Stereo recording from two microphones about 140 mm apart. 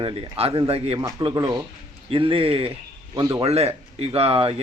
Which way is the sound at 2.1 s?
40° right (ahead or behind).